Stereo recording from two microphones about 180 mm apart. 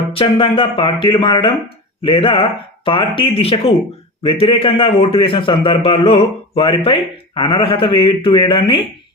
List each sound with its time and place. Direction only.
0.1 s a man's voice: 30° left (ahead or behind)